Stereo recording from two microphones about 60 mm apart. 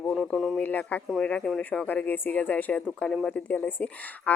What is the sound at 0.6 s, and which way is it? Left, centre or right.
Speech, left.